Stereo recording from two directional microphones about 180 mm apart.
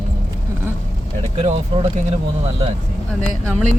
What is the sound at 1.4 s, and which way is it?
Speech, 40° right (ahead or behind).